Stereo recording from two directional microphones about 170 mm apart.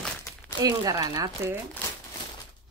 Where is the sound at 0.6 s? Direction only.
20° right (ahead or behind).